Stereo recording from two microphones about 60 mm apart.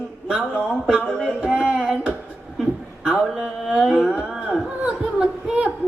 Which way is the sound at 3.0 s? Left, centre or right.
Centre.